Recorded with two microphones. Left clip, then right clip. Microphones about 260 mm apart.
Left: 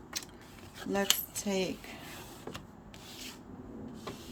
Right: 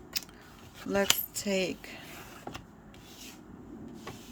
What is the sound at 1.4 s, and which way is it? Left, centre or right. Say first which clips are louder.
Speech: right 3 dB; centre.